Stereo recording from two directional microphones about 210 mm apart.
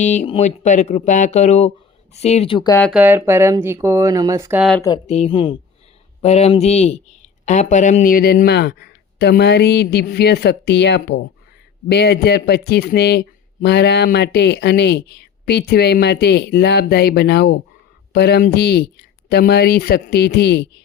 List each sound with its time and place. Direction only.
0.0 s speech: 35° left (ahead or behind)
2.9 s speech: 10° right (ahead or behind)
5.0 s speech: 30° left (ahead or behind); by 20.7 s 50° left (ahead or behind)